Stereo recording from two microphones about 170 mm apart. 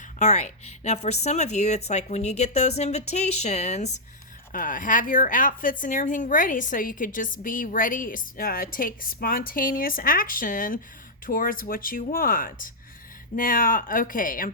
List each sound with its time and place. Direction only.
0.2 s a woman's voice: 45° left (ahead or behind)